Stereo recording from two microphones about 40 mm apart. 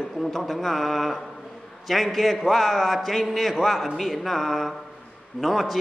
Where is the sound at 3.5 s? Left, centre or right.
Centre.